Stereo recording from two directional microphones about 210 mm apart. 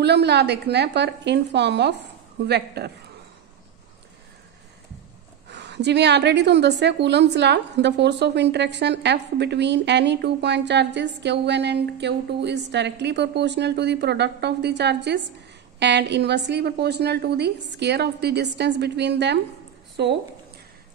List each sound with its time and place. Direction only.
0.0 s a woman's voice: 50° right (ahead or behind)
5.5 s a woman's voice: 55° right (ahead or behind)